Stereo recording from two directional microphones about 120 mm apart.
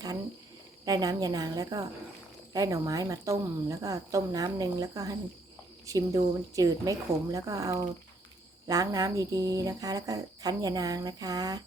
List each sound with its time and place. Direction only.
0.9 s a woman's voice: 30° right (ahead or behind)